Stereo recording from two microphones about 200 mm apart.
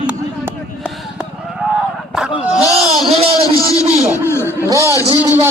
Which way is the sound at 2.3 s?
25° left (ahead or behind).